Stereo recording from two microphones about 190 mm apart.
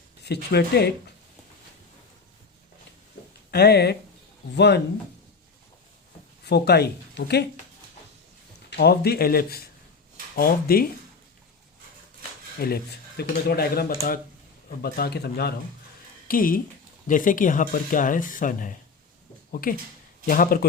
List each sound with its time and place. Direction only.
0.5 s speech: 60° left (ahead or behind)
3.5 s speech: 60° left (ahead or behind)
6.4 s speech: 60° left (ahead or behind)
8.7 s speech: 55° left (ahead or behind)
12.5 s speech: 55° left (ahead or behind)
16.3 s speech: 45° left (ahead or behind)